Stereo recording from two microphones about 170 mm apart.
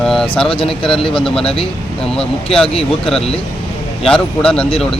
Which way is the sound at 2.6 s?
35° left (ahead or behind).